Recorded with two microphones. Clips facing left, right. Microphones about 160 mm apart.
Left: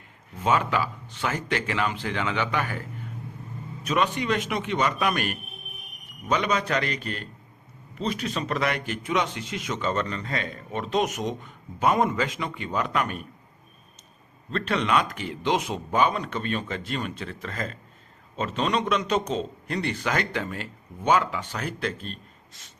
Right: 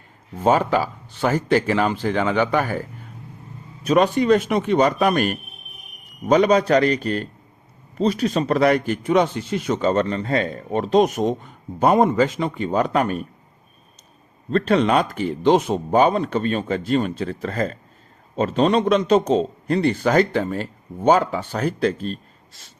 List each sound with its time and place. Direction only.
0.3 s a man's voice: 35° right (ahead or behind)
3.8 s a man's voice: 35° right (ahead or behind)
9.3 s a man's voice: 30° right (ahead or behind)
14.5 s a man's voice: 35° right (ahead or behind)